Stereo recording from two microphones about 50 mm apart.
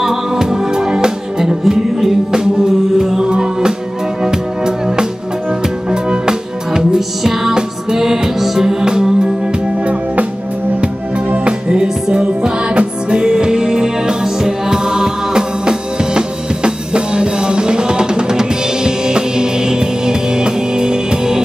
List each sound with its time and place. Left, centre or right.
0.0 s music: centre
11.2 s music: right